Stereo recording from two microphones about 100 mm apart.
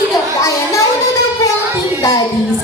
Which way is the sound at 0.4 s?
30° left (ahead or behind).